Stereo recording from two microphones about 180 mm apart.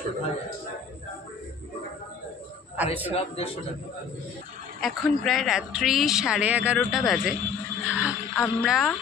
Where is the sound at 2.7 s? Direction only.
10° right (ahead or behind).